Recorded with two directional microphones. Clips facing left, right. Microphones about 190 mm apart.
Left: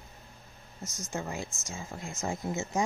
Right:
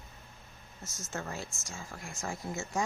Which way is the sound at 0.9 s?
15° left (ahead or behind).